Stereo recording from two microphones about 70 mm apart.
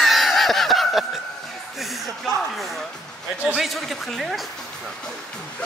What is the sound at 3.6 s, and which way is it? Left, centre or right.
Speech, centre.